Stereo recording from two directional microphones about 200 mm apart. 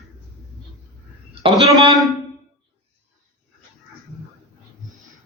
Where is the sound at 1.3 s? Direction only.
25° right (ahead or behind).